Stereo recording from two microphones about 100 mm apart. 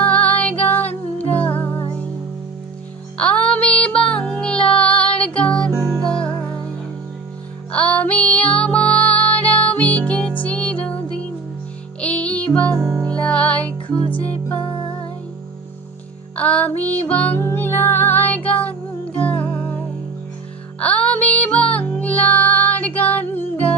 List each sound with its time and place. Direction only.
0.0 s music: 15° left (ahead or behind)
3.2 s music: 10° left (ahead or behind)
5.7 s music: 35° right (ahead or behind)
6.1 s music: 10° left (ahead or behind)
7.7 s music: 15° left (ahead or behind)
16.3 s music: 15° left (ahead or behind)